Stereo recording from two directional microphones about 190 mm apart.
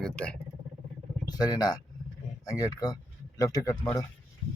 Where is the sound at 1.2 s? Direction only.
20° left (ahead or behind).